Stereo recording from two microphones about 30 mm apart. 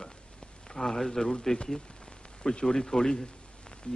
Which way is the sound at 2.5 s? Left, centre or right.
Left.